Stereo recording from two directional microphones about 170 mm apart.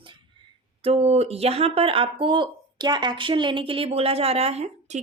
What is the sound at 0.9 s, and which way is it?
Speech, 35° right (ahead or behind).